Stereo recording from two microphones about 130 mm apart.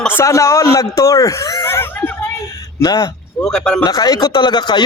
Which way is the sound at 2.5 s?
30° left (ahead or behind).